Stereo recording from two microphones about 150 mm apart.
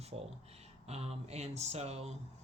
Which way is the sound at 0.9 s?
45° right (ahead or behind).